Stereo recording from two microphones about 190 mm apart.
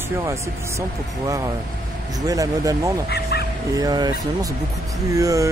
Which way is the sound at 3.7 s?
20° right (ahead or behind).